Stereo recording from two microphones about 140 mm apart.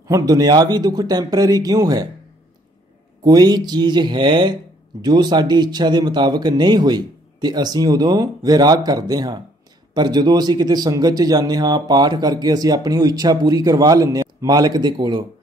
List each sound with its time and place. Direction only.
0.1 s speech: 25° right (ahead or behind)
3.3 s speech: 30° right (ahead or behind)